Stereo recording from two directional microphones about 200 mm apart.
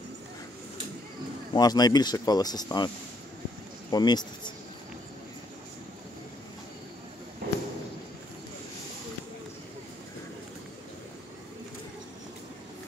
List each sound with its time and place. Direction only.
1.5 s speech: 20° left (ahead or behind)
3.9 s speech: 20° left (ahead or behind)
7.4 s a sound: 50° right (ahead or behind)